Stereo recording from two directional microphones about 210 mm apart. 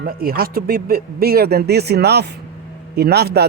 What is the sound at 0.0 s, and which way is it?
Speech, 45° right (ahead or behind).